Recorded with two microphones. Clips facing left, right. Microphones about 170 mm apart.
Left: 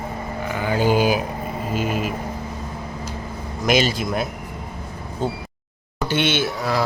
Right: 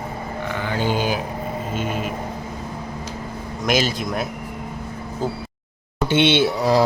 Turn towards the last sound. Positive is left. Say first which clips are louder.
# right 5 dB
turn(degrees=-35)  # may be behind; listen again after turning